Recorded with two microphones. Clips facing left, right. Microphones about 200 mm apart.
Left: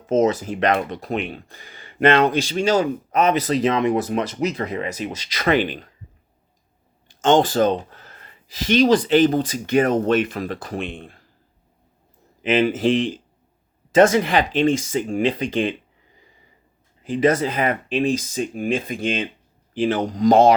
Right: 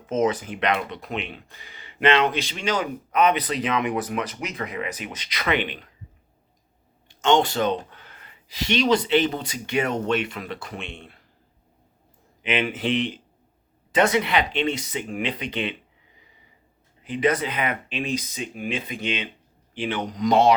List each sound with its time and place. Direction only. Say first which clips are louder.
0.0 s speech: left 5 dB; 40° left (ahead or behind)
7.2 s speech: left 4 dB; 50° left (ahead or behind)
12.4 s speech: left 7 dB; 40° left (ahead or behind)
17.0 s speech: left 4 dB; 45° left (ahead or behind)